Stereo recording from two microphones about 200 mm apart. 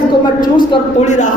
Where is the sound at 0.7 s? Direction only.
35° left (ahead or behind).